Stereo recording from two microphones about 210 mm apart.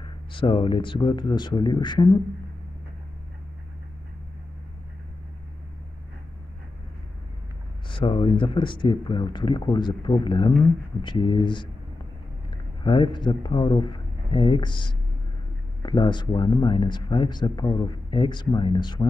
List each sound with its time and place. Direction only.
0.0 s speech: 25° left (ahead or behind)
7.9 s speech: 25° left (ahead or behind)